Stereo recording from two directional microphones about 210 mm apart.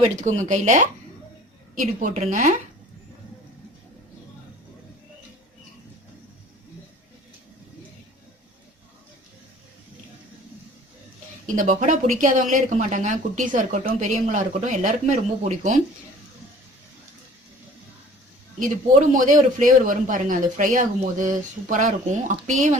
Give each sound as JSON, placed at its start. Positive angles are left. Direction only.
{"t": 0.2, "sound": "speech", "side_deg": -35}
{"t": 11.5, "sound": "speech", "side_deg": -35}
{"t": 19.1, "sound": "speech", "side_deg": -40}